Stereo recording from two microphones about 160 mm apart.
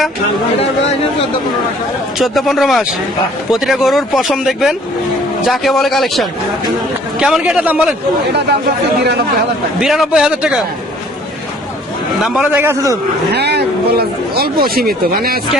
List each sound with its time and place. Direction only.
2.1 s speech: centre (ahead or behind)
9.8 s speech: centre (ahead or behind)
12.2 s speech: centre (ahead or behind)
12.5 s a man's voice: 15° right (ahead or behind)
13.3 s speech: 90° right; by 15.4 s 70° right (ahead or behind)